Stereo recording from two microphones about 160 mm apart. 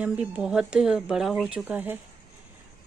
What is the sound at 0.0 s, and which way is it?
Speech, 10° right (ahead or behind).